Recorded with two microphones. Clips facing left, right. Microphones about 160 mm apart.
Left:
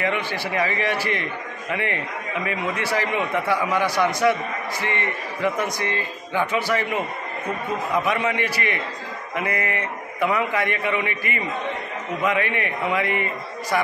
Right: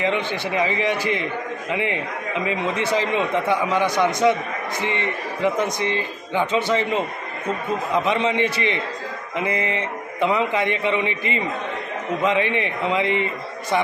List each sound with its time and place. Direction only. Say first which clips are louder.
0.0 s a man's voice: right 2 dB; 20° right (ahead or behind)